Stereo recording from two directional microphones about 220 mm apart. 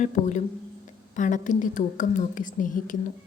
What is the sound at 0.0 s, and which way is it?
A woman's voice, 35° left (ahead or behind).